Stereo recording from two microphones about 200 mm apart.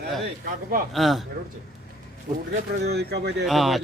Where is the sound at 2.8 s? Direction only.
55° right (ahead or behind).